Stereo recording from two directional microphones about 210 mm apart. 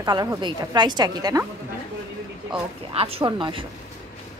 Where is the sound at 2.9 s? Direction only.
25° right (ahead or behind).